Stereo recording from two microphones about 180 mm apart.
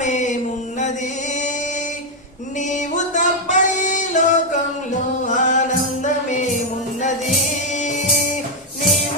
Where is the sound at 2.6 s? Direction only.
40° left (ahead or behind).